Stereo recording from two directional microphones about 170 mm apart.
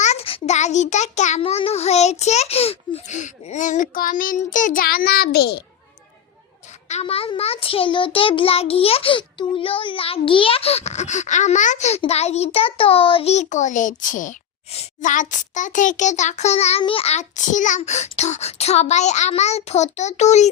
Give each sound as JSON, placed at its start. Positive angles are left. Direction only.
{"t": 0.0, "sound": "a child's voice", "side_deg": 40}
{"t": 6.8, "sound": "a child's voice", "side_deg": 40}